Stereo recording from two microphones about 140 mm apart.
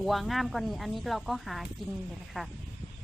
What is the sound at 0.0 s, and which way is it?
Speech, centre (ahead or behind).